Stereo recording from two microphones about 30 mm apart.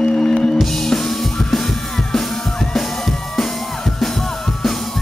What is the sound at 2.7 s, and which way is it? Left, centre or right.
Music, centre.